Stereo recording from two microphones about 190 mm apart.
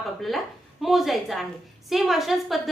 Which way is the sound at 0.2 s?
Centre (ahead or behind).